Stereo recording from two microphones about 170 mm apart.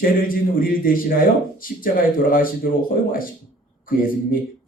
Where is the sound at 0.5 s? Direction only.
55° left (ahead or behind).